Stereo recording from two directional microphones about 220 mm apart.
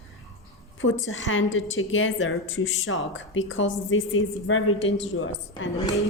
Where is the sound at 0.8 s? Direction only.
60° left (ahead or behind).